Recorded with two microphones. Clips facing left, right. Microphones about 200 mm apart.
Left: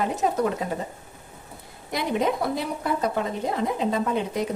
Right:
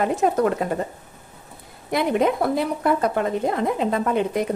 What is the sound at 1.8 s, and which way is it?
Speech, 55° right (ahead or behind).